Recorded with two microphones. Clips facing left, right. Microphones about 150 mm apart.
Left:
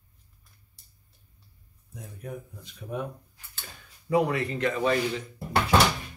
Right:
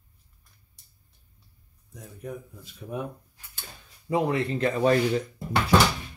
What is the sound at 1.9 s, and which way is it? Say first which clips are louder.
Speech: right 1 dB; centre (ahead or behind).